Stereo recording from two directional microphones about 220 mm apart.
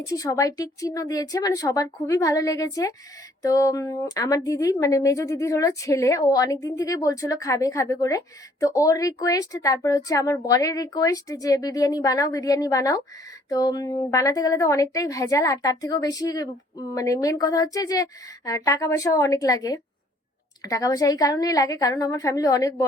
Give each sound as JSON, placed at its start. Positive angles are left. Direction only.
{"t": 0.0, "sound": "a woman's voice", "side_deg": 15}